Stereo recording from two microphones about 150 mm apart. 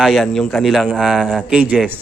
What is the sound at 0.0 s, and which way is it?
A man's voice, centre (ahead or behind).